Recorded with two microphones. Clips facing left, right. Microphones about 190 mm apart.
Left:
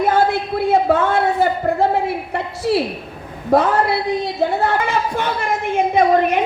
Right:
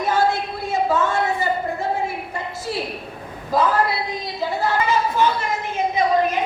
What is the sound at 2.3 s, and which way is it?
A woman's voice, 70° left (ahead or behind).